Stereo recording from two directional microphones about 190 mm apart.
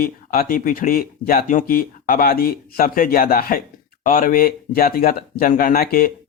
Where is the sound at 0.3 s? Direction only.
50° left (ahead or behind).